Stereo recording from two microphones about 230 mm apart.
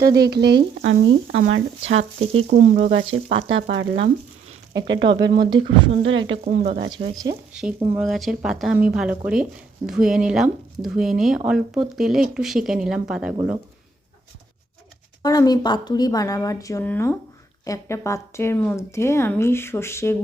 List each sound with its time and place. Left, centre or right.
0.2 s speech: right
2.5 s speech: right
2.9 s speech: right
5.0 s speech: right
6.0 s speech: right
6.4 s speech: right
6.9 s speech: centre
7.5 s speech: centre
15.2 s a woman's voice: centre